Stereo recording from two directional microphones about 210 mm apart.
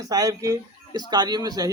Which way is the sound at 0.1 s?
15° right (ahead or behind).